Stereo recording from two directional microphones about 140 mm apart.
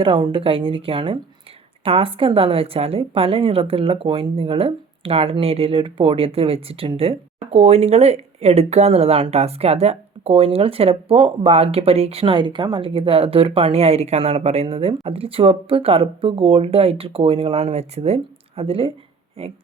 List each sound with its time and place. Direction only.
0.0 s a woman's voice: 40° right (ahead or behind)